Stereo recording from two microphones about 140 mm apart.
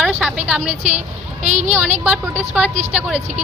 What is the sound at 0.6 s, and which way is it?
A woman's voice, 55° right (ahead or behind).